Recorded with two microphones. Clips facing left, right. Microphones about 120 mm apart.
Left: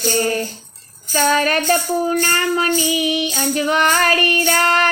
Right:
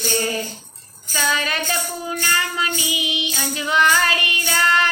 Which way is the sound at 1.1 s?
50° left (ahead or behind).